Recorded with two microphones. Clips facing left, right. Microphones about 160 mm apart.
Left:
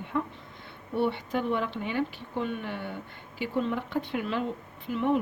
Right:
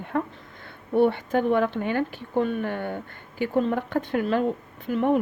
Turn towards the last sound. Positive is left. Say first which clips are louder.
# right 4 dB
turn(degrees=-50)  # may be behind; listen again after turning